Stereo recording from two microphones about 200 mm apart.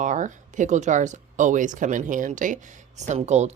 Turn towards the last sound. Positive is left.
turn(degrees=-35)  # may be behind; listen again after turning